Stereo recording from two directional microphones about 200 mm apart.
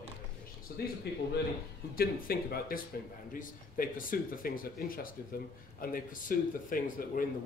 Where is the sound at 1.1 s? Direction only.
55° left (ahead or behind).